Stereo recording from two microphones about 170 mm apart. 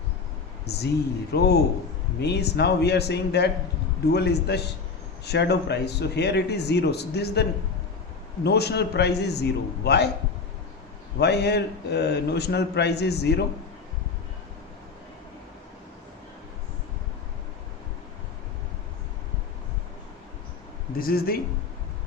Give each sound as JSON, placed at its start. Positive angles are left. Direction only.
{"t": 0.7, "sound": "a man's voice", "side_deg": 75}
{"t": 8.4, "sound": "a man's voice", "side_deg": 75}
{"t": 11.2, "sound": "a man's voice", "side_deg": 80}
{"t": 21.0, "sound": "speech", "side_deg": 60}